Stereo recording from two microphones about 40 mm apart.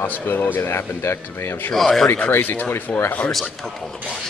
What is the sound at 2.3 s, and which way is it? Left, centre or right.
Speech, left.